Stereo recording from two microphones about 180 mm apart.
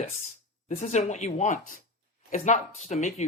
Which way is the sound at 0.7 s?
40° left (ahead or behind).